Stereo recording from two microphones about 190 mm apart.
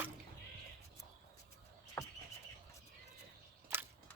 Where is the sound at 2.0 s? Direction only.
10° left (ahead or behind).